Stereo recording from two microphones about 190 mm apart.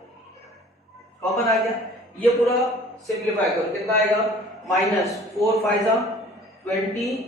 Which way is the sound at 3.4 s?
Centre (ahead or behind).